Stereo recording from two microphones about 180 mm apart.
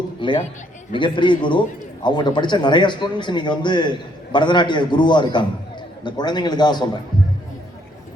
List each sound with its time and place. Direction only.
0.2 s a man's voice: 25° left (ahead or behind)